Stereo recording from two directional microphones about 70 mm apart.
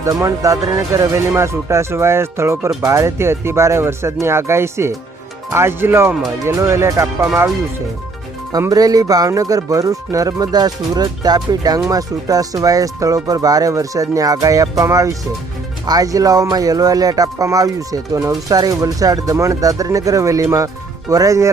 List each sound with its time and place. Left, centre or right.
0.0 s speech: right
8.7 s speech: right